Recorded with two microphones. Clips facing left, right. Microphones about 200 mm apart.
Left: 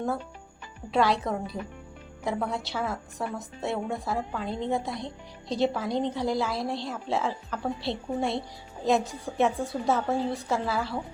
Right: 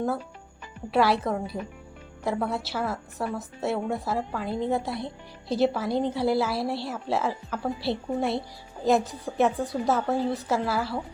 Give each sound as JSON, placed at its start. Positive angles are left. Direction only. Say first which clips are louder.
{"t": 0.9, "sound": "a woman's voice", "louder": "right 2 dB", "side_deg": -5}